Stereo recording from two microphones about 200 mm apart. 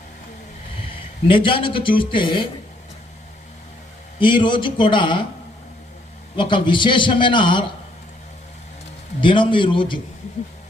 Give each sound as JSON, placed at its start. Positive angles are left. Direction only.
{"t": 1.3, "sound": "a man's voice", "side_deg": 25}
{"t": 4.2, "sound": "a man's voice", "side_deg": 25}
{"t": 6.3, "sound": "a man's voice", "side_deg": 25}
{"t": 9.2, "sound": "a man's voice", "side_deg": 25}